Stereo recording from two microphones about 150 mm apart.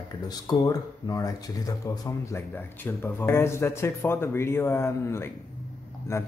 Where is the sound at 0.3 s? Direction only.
25° left (ahead or behind).